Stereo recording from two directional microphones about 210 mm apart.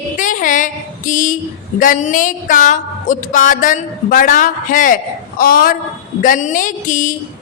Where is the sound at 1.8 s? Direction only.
40° left (ahead or behind).